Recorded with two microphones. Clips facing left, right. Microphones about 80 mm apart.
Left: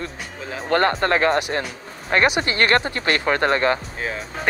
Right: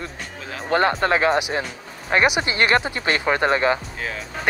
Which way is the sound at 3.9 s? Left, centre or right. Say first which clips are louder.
Left 2 dB; left.